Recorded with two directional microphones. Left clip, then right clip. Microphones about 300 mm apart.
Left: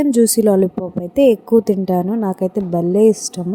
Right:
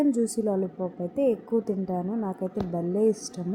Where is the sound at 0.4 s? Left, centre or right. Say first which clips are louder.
Left 13 dB; left.